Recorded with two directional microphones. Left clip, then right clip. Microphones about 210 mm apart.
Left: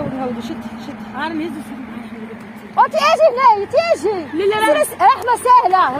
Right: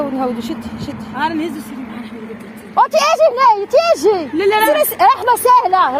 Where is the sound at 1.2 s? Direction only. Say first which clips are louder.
Right 5 dB; 45° right (ahead or behind).